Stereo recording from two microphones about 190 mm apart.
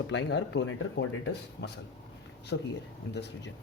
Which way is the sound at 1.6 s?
65° left (ahead or behind).